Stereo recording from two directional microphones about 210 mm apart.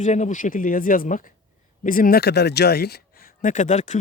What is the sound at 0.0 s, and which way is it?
Speech, 35° left (ahead or behind).